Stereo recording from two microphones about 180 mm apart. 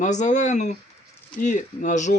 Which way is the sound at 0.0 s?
40° left (ahead or behind).